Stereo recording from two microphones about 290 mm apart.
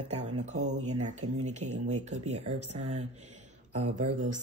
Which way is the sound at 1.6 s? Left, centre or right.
Right.